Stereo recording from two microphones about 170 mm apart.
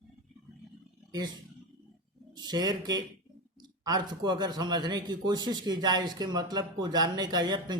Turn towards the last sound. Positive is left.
turn(degrees=-25)  # may be behind; listen again after turning